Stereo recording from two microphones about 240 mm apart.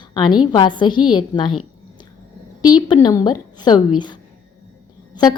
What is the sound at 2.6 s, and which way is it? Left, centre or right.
A woman's voice, centre.